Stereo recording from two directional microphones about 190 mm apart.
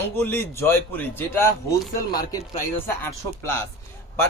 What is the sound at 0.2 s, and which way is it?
Speech, 10° left (ahead or behind).